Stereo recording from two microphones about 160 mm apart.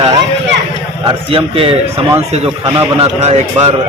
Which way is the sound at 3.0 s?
45° right (ahead or behind).